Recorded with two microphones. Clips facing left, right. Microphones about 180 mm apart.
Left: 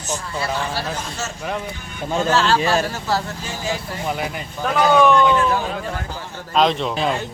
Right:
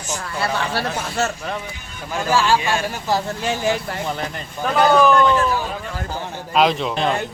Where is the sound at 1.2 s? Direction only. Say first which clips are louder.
Right 7 dB; 60° right (ahead or behind).